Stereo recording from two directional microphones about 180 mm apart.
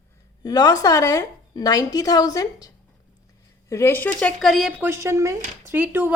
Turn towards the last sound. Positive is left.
turn(degrees=-10)  # may be behind; listen again after turning